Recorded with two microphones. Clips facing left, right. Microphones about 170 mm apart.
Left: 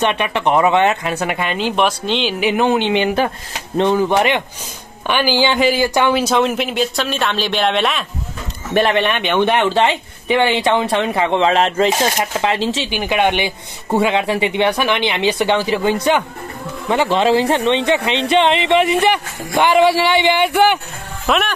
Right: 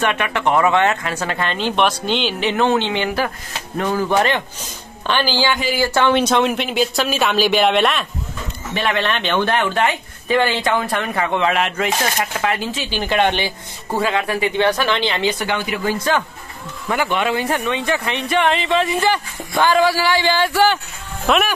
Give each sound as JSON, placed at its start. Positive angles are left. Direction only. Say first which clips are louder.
{"t": 0.0, "sound": "speech", "louder": "left 2 dB", "side_deg": 20}
{"t": 2.4, "sound": "speech", "louder": "left 2 dB", "side_deg": 15}
{"t": 8.9, "sound": "speech", "louder": "left 3 dB", "side_deg": 15}
{"t": 12.8, "sound": "speech", "louder": "right 2 dB", "side_deg": 15}
{"t": 13.9, "sound": "speech", "louder": "left 4 dB", "side_deg": 25}
{"t": 21.3, "sound": "speech", "louder": "even", "side_deg": 0}